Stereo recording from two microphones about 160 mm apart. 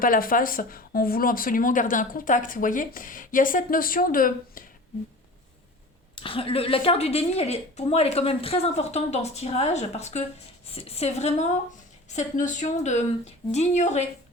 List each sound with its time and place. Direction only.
0.0 s speech: 60° left (ahead or behind)
6.1 s a woman's voice: 35° left (ahead or behind)